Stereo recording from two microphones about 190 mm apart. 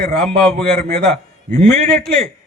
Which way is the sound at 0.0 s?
50° right (ahead or behind).